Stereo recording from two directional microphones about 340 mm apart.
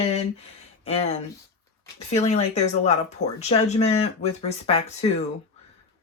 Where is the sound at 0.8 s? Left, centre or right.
Centre.